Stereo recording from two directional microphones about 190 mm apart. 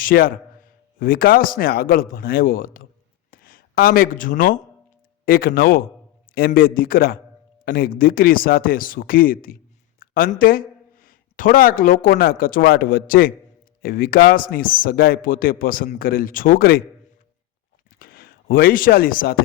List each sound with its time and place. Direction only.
0.0 s a man's voice: 50° left (ahead or behind)
18.0 s speech: 50° left (ahead or behind)